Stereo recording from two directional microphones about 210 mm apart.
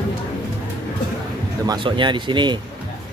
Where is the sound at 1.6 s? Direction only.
20° right (ahead or behind).